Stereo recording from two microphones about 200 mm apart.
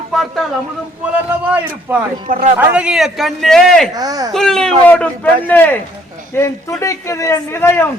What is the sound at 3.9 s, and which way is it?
Speech, 20° right (ahead or behind).